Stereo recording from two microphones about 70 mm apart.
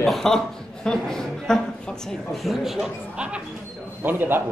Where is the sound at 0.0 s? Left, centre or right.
Centre.